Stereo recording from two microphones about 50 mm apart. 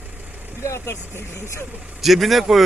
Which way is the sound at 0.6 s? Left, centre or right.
Left.